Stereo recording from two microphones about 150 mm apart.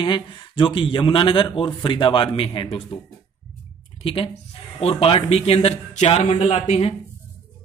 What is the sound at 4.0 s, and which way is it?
A man's voice, 40° left (ahead or behind).